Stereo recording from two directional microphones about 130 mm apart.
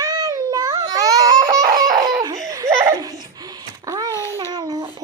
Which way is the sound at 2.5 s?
25° right (ahead or behind).